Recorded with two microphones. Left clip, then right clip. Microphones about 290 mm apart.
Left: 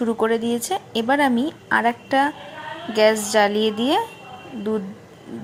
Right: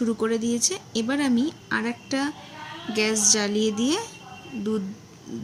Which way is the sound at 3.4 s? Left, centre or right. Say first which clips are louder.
Left 9 dB; centre.